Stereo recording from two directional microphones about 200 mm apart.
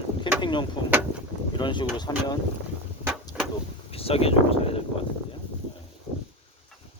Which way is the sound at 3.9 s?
30° left (ahead or behind).